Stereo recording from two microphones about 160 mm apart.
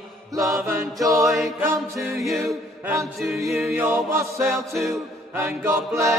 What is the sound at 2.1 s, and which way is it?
A capella, centre (ahead or behind).